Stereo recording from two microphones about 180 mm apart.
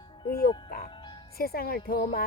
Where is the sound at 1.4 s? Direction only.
55° left (ahead or behind).